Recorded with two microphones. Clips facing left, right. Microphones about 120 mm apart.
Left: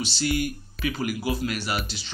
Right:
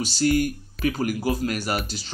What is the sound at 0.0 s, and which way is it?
Speech, 45° right (ahead or behind).